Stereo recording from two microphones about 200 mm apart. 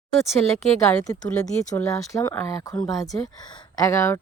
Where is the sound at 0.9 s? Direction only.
15° left (ahead or behind).